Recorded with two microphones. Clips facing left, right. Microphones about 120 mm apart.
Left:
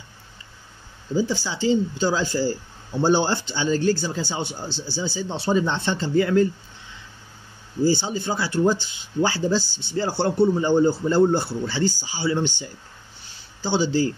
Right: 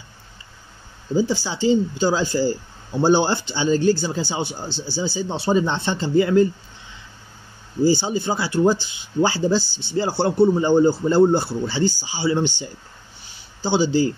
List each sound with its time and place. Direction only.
1.1 s a man's voice: 25° right (ahead or behind)
7.8 s a man's voice: 15° right (ahead or behind)